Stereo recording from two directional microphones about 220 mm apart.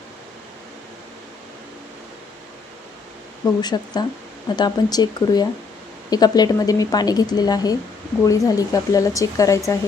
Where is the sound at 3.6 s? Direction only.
20° left (ahead or behind).